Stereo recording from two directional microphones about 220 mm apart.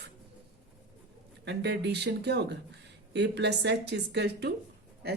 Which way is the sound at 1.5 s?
50° right (ahead or behind).